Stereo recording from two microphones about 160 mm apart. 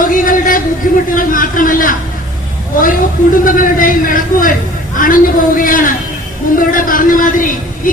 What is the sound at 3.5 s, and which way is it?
Speech, 60° left (ahead or behind).